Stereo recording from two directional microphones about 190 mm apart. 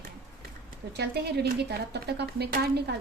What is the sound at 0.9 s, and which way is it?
A woman's voice, 60° right (ahead or behind).